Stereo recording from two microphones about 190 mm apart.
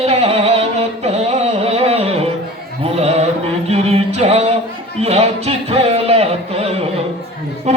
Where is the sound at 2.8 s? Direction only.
35° right (ahead or behind).